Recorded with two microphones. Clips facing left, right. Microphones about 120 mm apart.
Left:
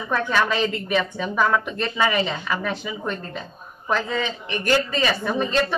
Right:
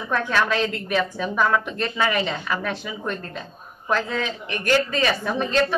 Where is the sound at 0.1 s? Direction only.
Centre (ahead or behind).